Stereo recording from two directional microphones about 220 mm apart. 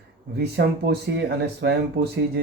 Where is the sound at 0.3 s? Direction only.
50° right (ahead or behind).